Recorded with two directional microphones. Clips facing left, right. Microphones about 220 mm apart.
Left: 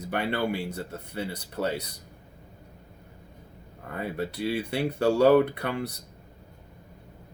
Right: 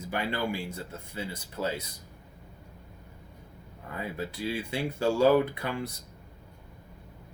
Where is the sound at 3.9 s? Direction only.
60° left (ahead or behind).